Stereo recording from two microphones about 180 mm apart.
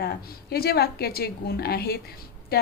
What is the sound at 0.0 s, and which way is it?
A woman's voice, 60° left (ahead or behind).